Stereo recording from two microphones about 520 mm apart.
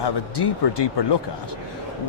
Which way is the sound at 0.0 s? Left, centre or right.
Left.